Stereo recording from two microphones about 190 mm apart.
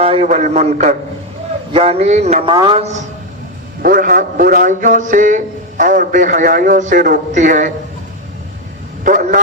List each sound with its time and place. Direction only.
0.0 s a man's voice: 35° right (ahead or behind)
2.5 s a woman's voice: 25° right (ahead or behind)
3.8 s a man's voice: 50° right (ahead or behind)
9.0 s a man's voice: 45° right (ahead or behind)